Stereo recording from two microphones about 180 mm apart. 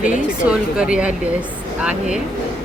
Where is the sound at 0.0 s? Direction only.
45° left (ahead or behind).